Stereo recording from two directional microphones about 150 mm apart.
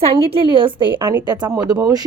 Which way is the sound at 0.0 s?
40° right (ahead or behind).